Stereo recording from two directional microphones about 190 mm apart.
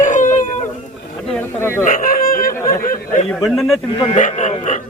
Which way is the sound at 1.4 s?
10° left (ahead or behind).